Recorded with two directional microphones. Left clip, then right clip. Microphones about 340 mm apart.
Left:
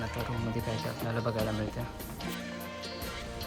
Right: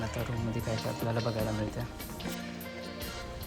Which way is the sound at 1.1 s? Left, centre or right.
Centre.